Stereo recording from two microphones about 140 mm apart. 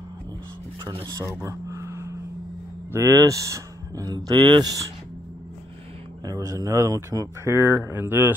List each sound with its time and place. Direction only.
0.8 s speech: 30° right (ahead or behind)
6.2 s speech: 25° right (ahead or behind)